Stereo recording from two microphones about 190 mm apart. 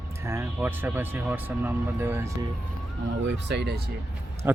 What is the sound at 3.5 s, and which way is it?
Speech, 65° right (ahead or behind).